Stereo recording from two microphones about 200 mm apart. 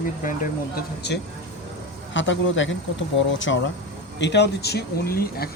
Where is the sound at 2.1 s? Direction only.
65° left (ahead or behind); by 5.5 s 50° left (ahead or behind).